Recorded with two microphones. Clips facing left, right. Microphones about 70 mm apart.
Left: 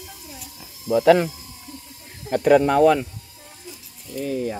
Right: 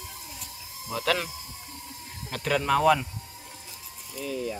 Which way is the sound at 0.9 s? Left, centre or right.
Centre.